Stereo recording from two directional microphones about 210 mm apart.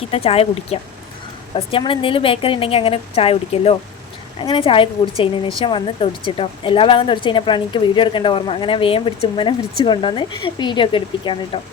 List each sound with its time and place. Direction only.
0.1 s a woman's voice: 30° left (ahead or behind)